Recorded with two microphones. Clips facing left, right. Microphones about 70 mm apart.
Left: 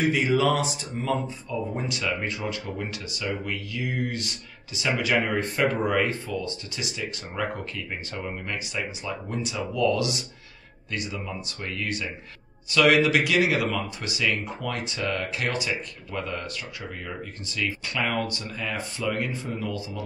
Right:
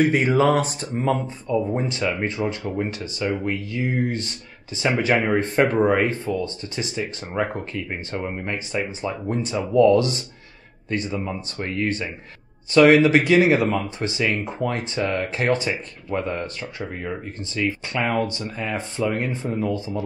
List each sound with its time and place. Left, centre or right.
0.1 s speech: right
17.6 s speech: right